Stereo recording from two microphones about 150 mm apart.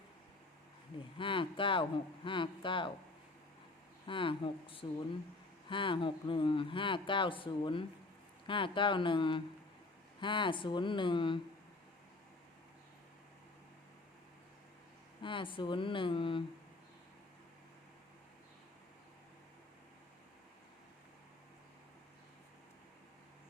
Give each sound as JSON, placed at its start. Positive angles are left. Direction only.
{"t": 1.2, "sound": "speech", "side_deg": 35}
{"t": 4.0, "sound": "speech", "side_deg": 35}
{"t": 15.2, "sound": "speech", "side_deg": 35}